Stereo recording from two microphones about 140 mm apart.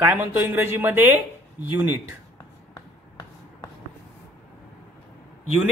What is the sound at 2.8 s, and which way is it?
Finger snapping, 25° left (ahead or behind).